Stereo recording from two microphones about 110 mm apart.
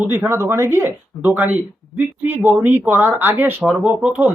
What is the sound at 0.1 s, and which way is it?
Speech, 20° right (ahead or behind).